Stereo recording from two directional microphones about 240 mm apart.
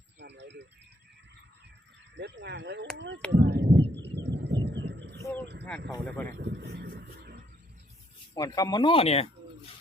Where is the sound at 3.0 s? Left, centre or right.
Right.